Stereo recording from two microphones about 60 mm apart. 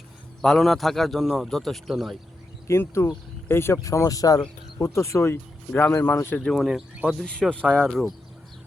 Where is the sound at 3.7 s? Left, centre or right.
Left.